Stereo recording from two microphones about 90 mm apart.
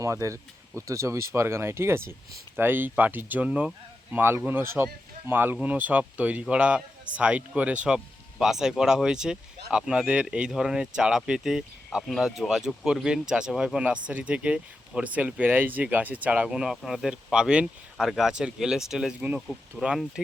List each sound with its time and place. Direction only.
0.0 s speech: 35° right (ahead or behind); by 20.2 s 5° right (ahead or behind)